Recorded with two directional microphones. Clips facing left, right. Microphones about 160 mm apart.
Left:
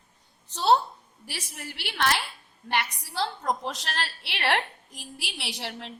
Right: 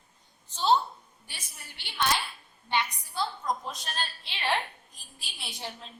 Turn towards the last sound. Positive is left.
turn(degrees=75)  # may be behind; listen again after turning